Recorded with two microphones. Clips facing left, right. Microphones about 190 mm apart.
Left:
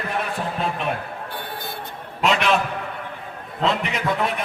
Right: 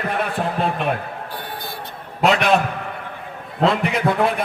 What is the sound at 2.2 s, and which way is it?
Speech, 45° right (ahead or behind).